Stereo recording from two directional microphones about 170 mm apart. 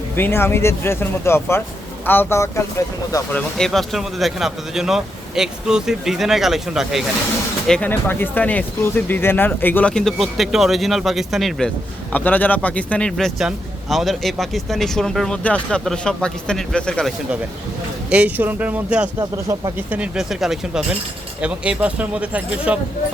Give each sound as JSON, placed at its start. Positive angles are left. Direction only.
{"t": 0.2, "sound": "speech", "side_deg": 15}
{"t": 3.6, "sound": "speech", "side_deg": 0}
{"t": 7.7, "sound": "speech", "side_deg": 10}
{"t": 18.1, "sound": "speech", "side_deg": -10}
{"t": 19.2, "sound": "speech", "side_deg": -20}
{"t": 19.9, "sound": "speech", "side_deg": -5}